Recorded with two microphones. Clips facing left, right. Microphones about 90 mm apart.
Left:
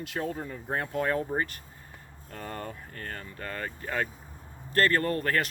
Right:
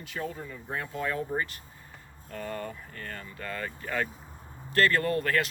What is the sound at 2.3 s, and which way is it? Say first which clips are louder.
Speech: right 2 dB; 35° left (ahead or behind).